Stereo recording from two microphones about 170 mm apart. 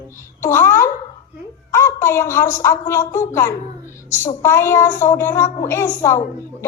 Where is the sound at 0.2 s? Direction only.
15° left (ahead or behind).